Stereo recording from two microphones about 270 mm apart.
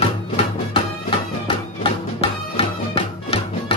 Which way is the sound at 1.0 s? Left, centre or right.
Left.